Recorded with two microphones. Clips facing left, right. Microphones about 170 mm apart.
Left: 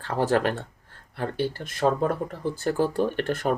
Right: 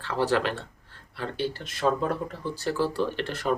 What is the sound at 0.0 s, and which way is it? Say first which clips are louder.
Speech: left 2 dB; 45° left (ahead or behind).